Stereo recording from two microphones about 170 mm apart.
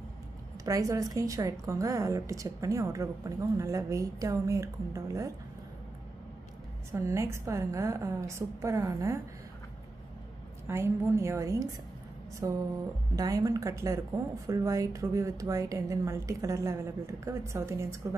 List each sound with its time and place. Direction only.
0.7 s a woman's voice: 20° right (ahead or behind)
6.9 s a woman's voice: 15° right (ahead or behind)
10.7 s a woman's voice: 15° right (ahead or behind)